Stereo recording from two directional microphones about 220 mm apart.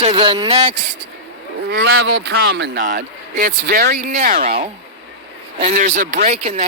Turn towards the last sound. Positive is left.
turn(degrees=-30)  # may be behind; listen again after turning